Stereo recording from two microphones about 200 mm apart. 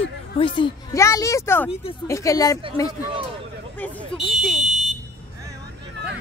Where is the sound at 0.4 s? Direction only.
25° left (ahead or behind).